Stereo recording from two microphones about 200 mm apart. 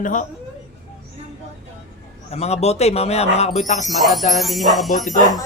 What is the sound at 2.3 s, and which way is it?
Speech, 35° left (ahead or behind).